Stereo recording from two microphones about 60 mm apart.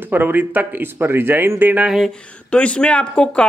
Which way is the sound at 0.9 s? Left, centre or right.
Right.